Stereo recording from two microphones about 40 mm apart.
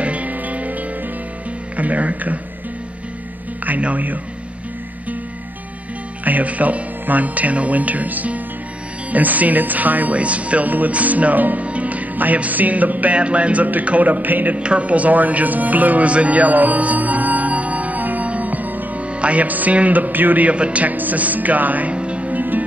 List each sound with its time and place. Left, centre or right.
0.0 s music: right
1.8 s speech: right
3.8 s a man's voice: right
6.2 s a man's voice: right
10.1 s speech: right
11.6 s music: right
13.8 s a man's voice: right
14.6 s music: right
18.9 s a man's voice: right
20.5 s speech: right
20.9 s a man's voice: right
21.9 s music: right
22.3 s music: right